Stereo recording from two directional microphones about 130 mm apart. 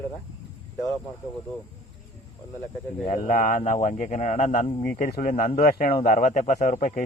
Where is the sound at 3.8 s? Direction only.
70° left (ahead or behind).